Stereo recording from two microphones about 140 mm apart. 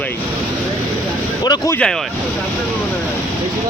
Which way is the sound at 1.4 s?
30° left (ahead or behind).